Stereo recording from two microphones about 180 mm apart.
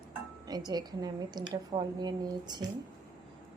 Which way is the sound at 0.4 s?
20° right (ahead or behind).